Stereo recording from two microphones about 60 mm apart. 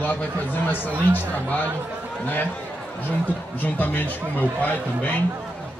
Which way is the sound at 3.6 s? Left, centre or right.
Left.